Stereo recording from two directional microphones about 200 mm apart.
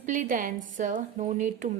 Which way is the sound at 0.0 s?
40° right (ahead or behind).